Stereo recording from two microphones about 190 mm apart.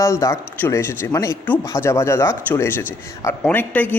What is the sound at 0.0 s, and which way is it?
Speech, 15° left (ahead or behind).